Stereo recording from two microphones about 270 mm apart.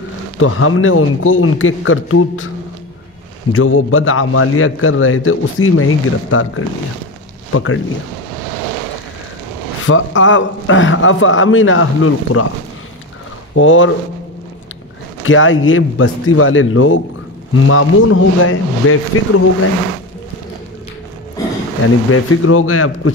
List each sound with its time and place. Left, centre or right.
0.4 s a man's voice: left
3.5 s a man's voice: left
9.8 s a man's voice: left
13.6 s a man's voice: left
15.2 s a man's voice: left
21.8 s a man's voice: left